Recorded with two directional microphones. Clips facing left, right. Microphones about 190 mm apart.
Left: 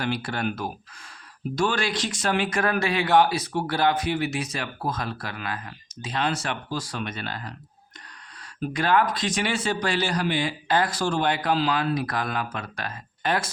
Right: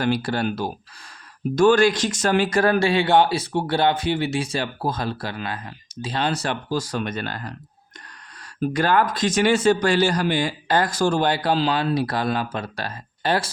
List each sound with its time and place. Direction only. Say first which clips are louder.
0.0 s speech: right 5 dB; 40° right (ahead or behind)
1.5 s speech: right 10 dB; 45° right (ahead or behind)
8.7 s speech: right 2 dB; 45° right (ahead or behind)